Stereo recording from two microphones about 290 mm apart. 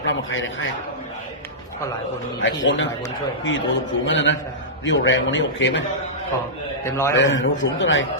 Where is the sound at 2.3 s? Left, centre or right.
Left.